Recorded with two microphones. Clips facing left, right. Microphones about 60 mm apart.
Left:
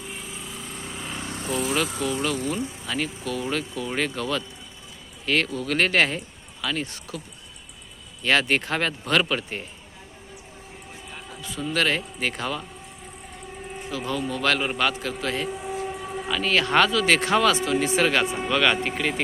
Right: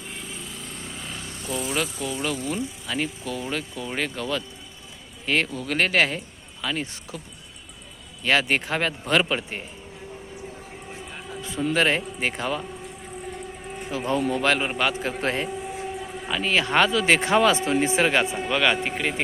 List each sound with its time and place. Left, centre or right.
0.2 s lawn mower: centre
1.1 s vehicle: left
1.7 s a man's voice: centre
8.2 s speech: centre
11.4 s speech: right
13.8 s speech: right; by 14.9 s centre
15.2 s speech: right
16.3 s speech: centre
16.9 s speech: right
18.4 s speech: centre